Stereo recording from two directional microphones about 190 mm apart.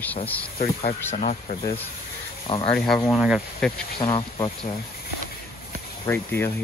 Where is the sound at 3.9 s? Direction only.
25° left (ahead or behind).